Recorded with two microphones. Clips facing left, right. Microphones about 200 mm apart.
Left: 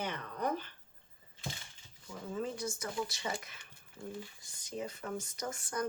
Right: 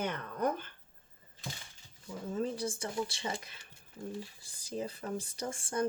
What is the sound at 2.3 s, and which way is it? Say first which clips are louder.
Speech: right 3 dB; 35° right (ahead or behind).